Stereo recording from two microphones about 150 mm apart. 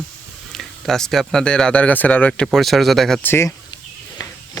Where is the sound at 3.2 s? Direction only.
15° left (ahead or behind).